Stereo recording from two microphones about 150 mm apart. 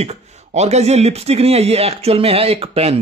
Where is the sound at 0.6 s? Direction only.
45° right (ahead or behind).